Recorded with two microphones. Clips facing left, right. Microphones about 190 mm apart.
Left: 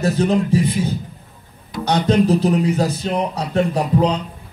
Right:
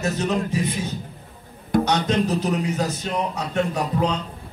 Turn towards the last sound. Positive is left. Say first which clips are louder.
# left 5 dB
turn(degrees=35)  # may be behind; listen again after turning